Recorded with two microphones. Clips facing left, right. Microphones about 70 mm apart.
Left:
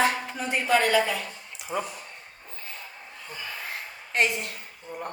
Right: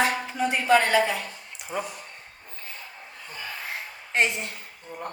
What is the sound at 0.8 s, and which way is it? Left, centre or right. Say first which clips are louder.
Speech: right 1 dB; right.